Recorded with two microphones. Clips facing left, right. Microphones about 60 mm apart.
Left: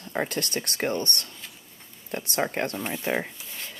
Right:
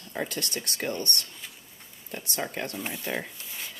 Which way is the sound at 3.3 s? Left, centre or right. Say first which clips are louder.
Left 1 dB; centre.